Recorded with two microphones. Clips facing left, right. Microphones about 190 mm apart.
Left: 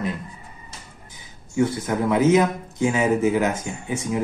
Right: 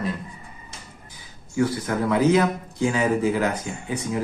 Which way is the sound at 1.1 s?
25° left (ahead or behind).